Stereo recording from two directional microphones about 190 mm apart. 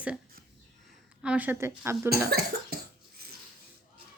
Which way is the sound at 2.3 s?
55° right (ahead or behind).